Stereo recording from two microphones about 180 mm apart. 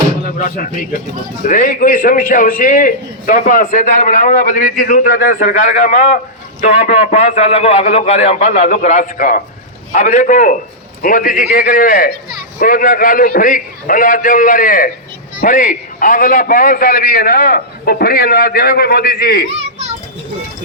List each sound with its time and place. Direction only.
0.4 s a man's voice: 50° left (ahead or behind)